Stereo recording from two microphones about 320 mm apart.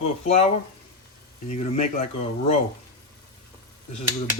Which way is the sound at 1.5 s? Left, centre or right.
Left.